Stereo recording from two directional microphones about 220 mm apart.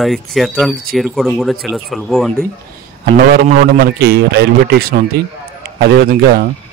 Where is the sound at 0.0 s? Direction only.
Centre (ahead or behind).